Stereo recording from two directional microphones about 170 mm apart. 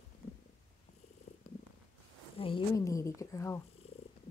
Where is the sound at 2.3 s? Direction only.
30° left (ahead or behind).